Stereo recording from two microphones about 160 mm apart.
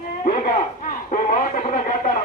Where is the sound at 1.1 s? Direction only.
50° left (ahead or behind).